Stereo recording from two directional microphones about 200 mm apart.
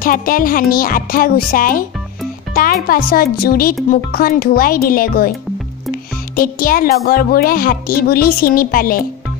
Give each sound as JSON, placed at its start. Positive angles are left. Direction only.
{"t": 0.0, "sound": "a child's voice", "side_deg": 45}
{"t": 6.3, "sound": "a child's voice", "side_deg": 45}